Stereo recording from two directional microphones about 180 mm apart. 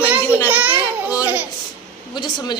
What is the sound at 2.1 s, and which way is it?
Speech, 25° left (ahead or behind).